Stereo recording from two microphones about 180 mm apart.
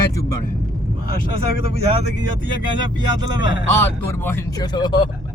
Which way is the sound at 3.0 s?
25° right (ahead or behind).